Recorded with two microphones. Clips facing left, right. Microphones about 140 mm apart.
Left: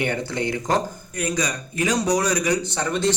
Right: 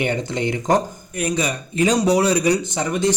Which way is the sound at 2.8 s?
15° right (ahead or behind).